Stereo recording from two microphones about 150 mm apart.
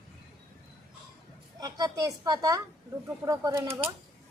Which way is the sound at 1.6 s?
25° right (ahead or behind).